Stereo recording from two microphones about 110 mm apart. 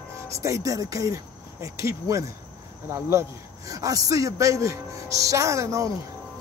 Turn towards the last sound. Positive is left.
turn(degrees=-30)  # may be behind; listen again after turning